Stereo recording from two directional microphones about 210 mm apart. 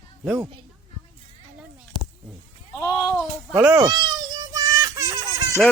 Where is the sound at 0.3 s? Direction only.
10° right (ahead or behind).